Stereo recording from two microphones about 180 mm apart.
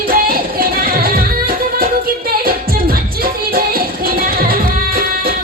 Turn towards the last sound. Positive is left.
turn(degrees=-55)  # may be behind; listen again after turning